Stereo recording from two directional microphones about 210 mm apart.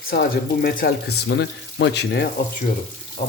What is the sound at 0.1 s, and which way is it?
Speech, 45° left (ahead or behind).